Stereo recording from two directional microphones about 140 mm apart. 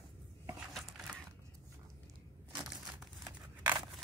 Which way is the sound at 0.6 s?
Centre (ahead or behind).